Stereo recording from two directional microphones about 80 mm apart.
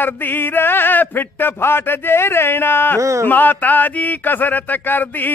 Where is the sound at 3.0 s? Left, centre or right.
Right.